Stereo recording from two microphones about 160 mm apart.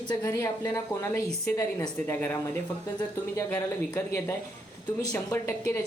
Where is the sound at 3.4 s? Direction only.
15° left (ahead or behind).